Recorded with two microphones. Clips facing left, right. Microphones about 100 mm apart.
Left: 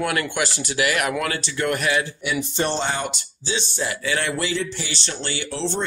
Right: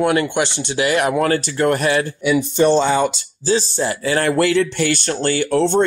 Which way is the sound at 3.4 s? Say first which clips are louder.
Right 8 dB; 35° right (ahead or behind).